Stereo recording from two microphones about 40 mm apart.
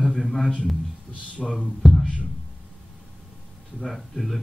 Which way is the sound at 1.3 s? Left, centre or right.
Left.